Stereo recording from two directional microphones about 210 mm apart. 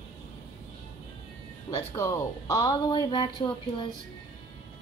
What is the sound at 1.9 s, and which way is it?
A woman's voice, 15° left (ahead or behind).